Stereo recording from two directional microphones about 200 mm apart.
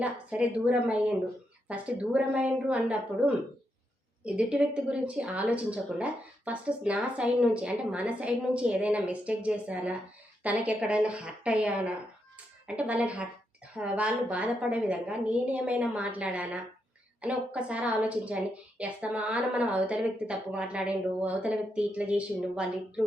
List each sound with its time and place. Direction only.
0.0 s a woman's voice: 5° right (ahead or behind)